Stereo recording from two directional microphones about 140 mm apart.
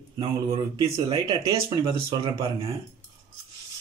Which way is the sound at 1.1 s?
30° right (ahead or behind).